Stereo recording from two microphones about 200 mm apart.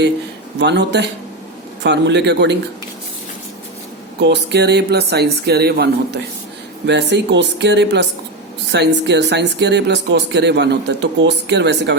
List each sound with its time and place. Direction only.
0.6 s speech: 60° right (ahead or behind)
4.2 s speech: 60° right (ahead or behind)